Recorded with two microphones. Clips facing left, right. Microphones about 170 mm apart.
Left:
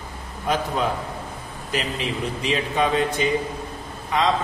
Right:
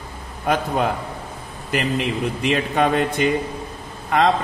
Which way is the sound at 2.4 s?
60° right (ahead or behind).